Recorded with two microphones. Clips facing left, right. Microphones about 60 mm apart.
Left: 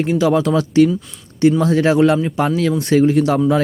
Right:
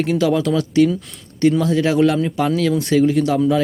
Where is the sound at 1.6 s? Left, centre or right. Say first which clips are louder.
Left 2 dB; left.